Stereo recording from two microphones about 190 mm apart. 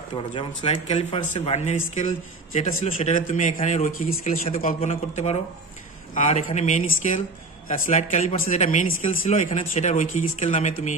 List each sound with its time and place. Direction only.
0.1 s speech: 25° left (ahead or behind); by 4.4 s 45° left (ahead or behind)
4.7 s speech: 35° left (ahead or behind)